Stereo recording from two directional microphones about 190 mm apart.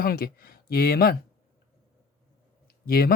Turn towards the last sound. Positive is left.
turn(degrees=55)  # may be behind; listen again after turning